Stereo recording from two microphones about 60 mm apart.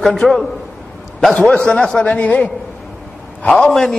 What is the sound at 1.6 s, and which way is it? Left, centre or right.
Speech, centre.